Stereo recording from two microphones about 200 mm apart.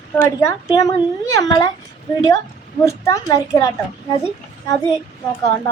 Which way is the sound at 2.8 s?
15° left (ahead or behind).